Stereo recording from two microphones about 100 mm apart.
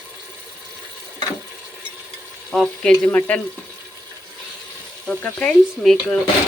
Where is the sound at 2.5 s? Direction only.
5° left (ahead or behind).